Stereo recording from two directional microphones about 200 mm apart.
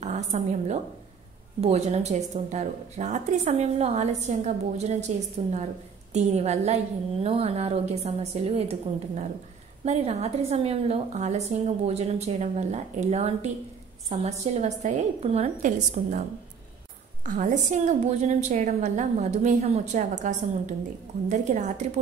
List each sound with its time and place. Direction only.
0.0 s a woman's voice: 35° right (ahead or behind)